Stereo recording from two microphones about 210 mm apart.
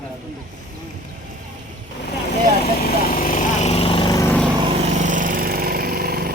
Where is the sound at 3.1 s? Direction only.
40° left (ahead or behind); by 4.3 s 20° left (ahead or behind).